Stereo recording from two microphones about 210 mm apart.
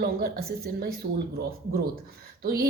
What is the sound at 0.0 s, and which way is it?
Speech, 45° right (ahead or behind).